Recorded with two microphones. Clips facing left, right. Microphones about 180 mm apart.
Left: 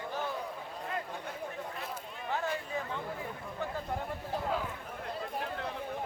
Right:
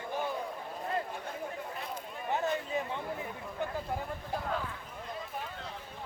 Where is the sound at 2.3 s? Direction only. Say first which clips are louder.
Right 3 dB; 20° right (ahead or behind).